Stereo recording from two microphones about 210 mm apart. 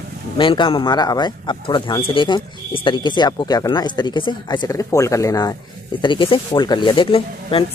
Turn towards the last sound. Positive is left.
turn(degrees=25)  # may be behind; listen again after turning